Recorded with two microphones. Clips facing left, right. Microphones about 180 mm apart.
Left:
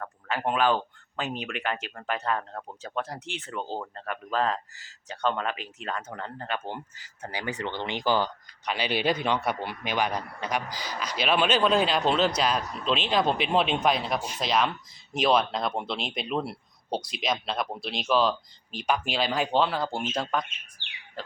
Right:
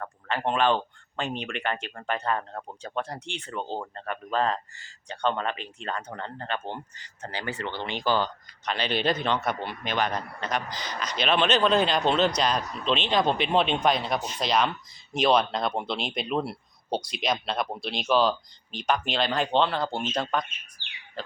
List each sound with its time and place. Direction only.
0.0 s speech: 5° left (ahead or behind)
20.8 s bird: 65° left (ahead or behind)